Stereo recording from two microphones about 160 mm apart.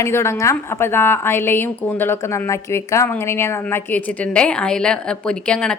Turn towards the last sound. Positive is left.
turn(degrees=5)  # may be behind; listen again after turning